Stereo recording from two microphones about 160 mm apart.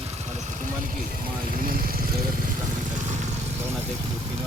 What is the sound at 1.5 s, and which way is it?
Speech, 65° right (ahead or behind).